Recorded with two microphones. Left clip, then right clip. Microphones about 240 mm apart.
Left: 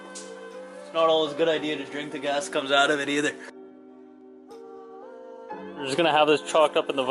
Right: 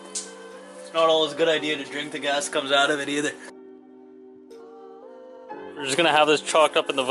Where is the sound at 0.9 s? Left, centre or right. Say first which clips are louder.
Right 2 dB; centre.